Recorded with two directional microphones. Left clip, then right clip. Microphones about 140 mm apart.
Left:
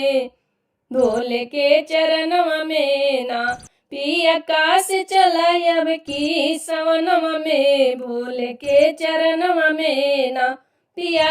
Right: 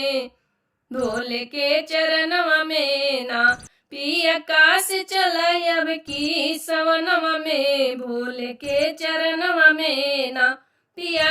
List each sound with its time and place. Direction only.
0.0 s music: 30° left (ahead or behind)
0.9 s a sound: centre (ahead or behind)
1.1 s music: 30° left (ahead or behind)